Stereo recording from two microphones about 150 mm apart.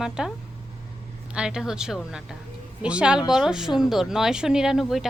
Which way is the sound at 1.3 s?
5° right (ahead or behind).